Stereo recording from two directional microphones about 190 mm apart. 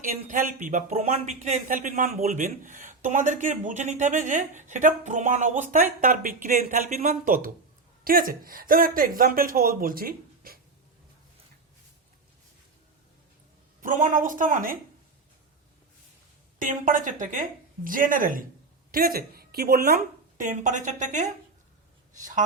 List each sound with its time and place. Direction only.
0.0 s speech: 45° right (ahead or behind)
13.8 s speech: 45° right (ahead or behind)
16.6 s a woman's voice: 45° right (ahead or behind)